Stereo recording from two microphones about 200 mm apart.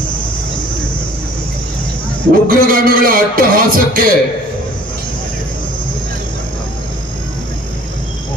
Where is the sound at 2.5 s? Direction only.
45° right (ahead or behind).